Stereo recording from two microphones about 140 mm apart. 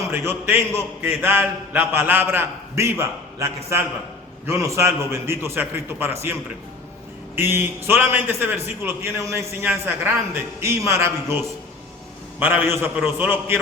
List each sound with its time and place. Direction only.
0.0 s a man's voice: 20° right (ahead or behind)